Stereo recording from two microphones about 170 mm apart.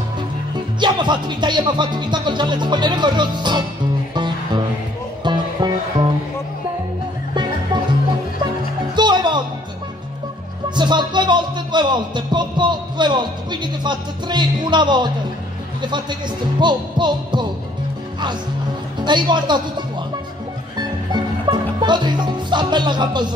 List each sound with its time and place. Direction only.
0.7 s music: 25° right (ahead or behind)
5.2 s music: 25° right (ahead or behind)
8.9 s music: 25° right (ahead or behind)
10.8 s music: 25° right (ahead or behind)
19.0 s music: 25° right (ahead or behind)
20.7 s music: 25° right (ahead or behind)